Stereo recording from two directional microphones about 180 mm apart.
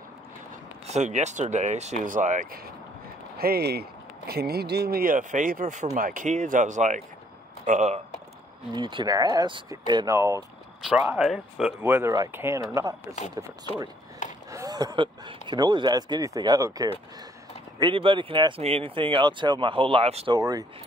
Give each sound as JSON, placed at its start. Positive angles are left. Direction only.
{"t": 0.8, "sound": "speech", "side_deg": -40}
{"t": 3.3, "sound": "speech", "side_deg": -60}
{"t": 8.7, "sound": "speech", "side_deg": -25}
{"t": 13.1, "sound": "speech", "side_deg": 40}
{"t": 14.5, "sound": "speech", "side_deg": -20}
{"t": 20.3, "sound": "speech", "side_deg": -20}